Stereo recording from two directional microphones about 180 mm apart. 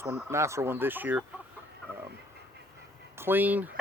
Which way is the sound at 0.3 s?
15° right (ahead or behind).